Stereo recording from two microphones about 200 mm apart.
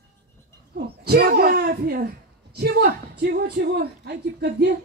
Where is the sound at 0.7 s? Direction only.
50° right (ahead or behind).